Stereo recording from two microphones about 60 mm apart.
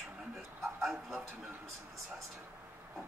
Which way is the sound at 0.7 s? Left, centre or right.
Centre.